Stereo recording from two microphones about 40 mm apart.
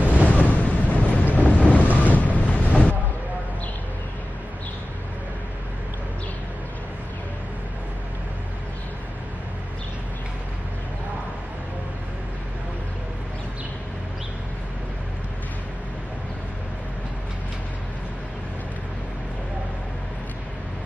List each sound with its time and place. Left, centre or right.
0.0 s a sound: right
0.5 s vehicle: left
1.3 s wind noise: left
2.0 s vehicle: left